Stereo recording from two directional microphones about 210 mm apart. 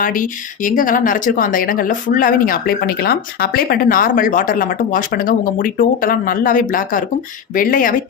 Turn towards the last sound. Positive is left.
turn(degrees=40)  # may be behind; listen again after turning